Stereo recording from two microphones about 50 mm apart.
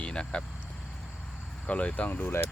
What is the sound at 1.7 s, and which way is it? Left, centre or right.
Speech, left.